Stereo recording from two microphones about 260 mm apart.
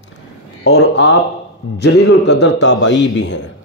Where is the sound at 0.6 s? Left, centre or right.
Left.